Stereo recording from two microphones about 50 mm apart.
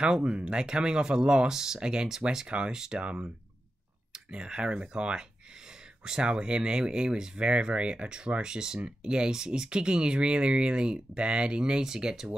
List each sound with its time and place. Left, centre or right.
0.0 s speech: centre